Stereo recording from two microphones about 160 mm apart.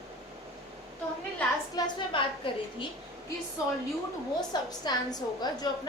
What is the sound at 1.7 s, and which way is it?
A woman's voice, 30° left (ahead or behind).